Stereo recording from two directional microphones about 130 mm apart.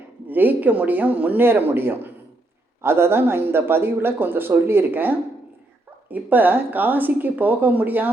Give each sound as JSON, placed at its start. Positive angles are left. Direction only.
{"t": 0.3, "sound": "speech", "side_deg": -15}